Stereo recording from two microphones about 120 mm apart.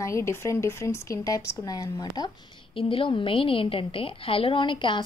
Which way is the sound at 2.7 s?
45° left (ahead or behind).